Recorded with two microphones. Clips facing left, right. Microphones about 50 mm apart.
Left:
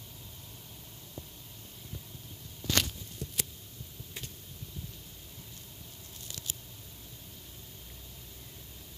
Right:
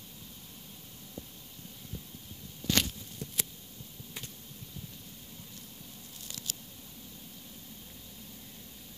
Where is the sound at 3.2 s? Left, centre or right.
Right.